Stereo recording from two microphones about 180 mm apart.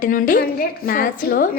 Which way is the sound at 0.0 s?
50° left (ahead or behind).